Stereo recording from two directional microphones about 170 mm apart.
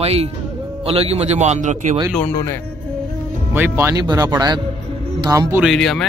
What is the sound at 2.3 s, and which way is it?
Speech, 15° left (ahead or behind).